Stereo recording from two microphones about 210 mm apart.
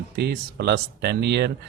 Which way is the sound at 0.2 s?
50° right (ahead or behind).